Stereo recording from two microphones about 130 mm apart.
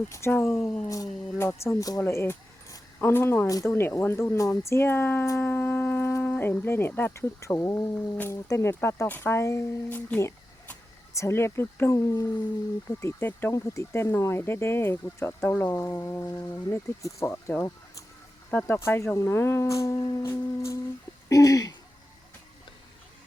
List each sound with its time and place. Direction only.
0.1 s speech: 15° left (ahead or behind)
2.0 s mechanisms: 20° left (ahead or behind)
10.2 s speech: 20° left (ahead or behind)
21.2 s throat clearing: 25° left (ahead or behind)